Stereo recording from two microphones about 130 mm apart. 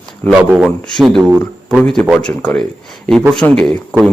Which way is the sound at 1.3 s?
15° right (ahead or behind).